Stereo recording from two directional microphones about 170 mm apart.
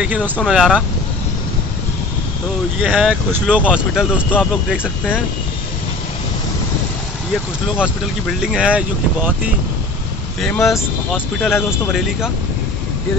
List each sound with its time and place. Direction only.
0.0 s speech: 10° right (ahead or behind)
2.8 s speech: 5° right (ahead or behind)
7.6 s speech: 5° right (ahead or behind)